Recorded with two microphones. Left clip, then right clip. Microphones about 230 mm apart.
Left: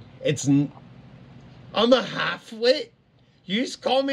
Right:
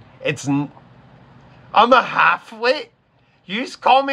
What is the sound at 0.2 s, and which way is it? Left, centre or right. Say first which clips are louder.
Speech: right 1 dB; centre.